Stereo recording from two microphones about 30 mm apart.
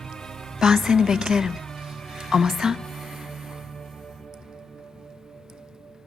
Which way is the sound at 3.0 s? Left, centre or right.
Centre.